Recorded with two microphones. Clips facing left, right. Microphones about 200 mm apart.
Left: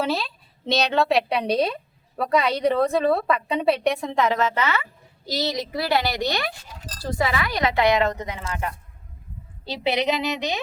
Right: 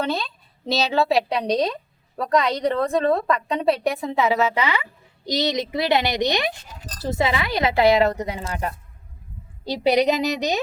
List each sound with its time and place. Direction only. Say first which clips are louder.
0.0 s a woman's voice: even; centre (ahead or behind); by 10.6 s 40° right (ahead or behind)